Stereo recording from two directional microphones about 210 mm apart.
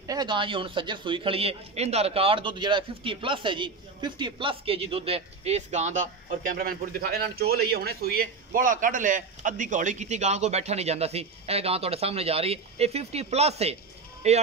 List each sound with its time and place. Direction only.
0.0 s a man's voice: 20° right (ahead or behind)